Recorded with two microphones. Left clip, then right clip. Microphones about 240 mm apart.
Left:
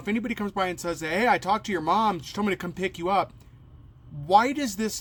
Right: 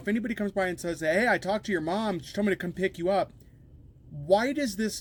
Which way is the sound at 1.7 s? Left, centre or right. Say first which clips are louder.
Left 6 dB; left.